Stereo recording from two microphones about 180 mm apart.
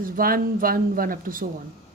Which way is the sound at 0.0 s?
50° right (ahead or behind).